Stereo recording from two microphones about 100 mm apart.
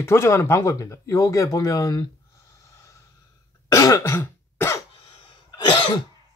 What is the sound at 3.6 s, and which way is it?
Throat clearing, 35° left (ahead or behind).